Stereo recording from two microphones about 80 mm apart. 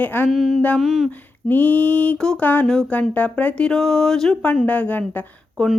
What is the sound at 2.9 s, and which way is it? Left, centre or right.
Speech, centre.